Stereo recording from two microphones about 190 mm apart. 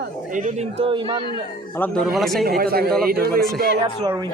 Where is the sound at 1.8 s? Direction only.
Centre (ahead or behind).